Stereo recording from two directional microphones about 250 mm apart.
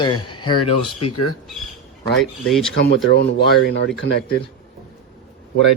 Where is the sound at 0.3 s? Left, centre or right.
Centre.